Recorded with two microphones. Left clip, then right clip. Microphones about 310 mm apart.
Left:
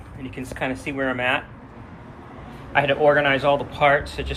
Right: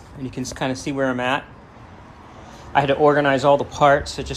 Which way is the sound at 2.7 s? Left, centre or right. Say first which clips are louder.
Right 1 dB; centre.